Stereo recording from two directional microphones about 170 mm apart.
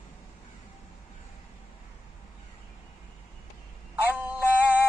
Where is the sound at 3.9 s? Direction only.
10° right (ahead or behind).